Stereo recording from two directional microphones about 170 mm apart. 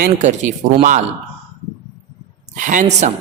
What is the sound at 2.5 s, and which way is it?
Speech, 50° right (ahead or behind).